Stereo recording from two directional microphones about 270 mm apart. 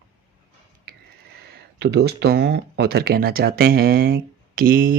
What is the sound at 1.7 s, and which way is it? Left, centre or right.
Speech, right.